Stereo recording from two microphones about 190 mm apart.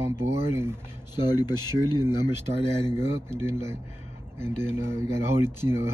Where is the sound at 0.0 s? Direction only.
15° right (ahead or behind).